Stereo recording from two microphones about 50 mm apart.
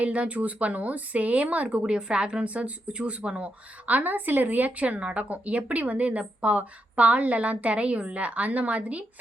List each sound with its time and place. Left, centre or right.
0.0 s speech: right